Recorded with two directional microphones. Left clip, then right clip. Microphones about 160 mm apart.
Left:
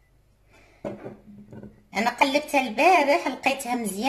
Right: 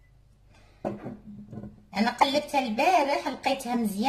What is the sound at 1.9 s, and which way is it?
Speech, 35° left (ahead or behind).